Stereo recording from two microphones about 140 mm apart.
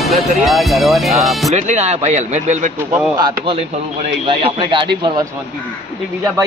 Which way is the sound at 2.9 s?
10° right (ahead or behind).